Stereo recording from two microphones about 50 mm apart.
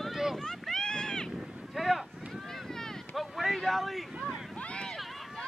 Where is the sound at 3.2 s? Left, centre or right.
Centre.